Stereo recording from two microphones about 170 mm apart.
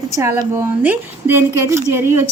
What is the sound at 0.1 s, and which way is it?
A woman's voice, 15° right (ahead or behind).